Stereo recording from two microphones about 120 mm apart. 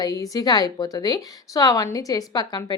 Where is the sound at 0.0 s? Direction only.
30° left (ahead or behind).